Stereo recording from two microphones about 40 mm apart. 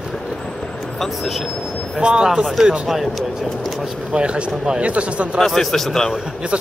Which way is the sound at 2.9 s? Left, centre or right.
Centre.